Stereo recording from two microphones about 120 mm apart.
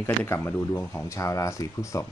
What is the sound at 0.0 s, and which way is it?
Speech, 20° left (ahead or behind).